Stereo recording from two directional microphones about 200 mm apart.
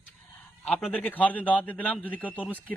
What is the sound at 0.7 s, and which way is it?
A man's voice, 5° left (ahead or behind).